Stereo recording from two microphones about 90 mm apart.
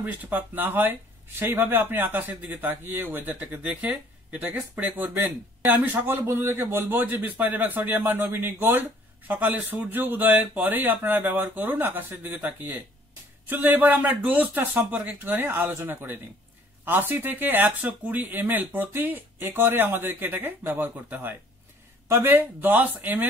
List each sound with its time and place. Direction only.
0.0 s speech: 20° right (ahead or behind)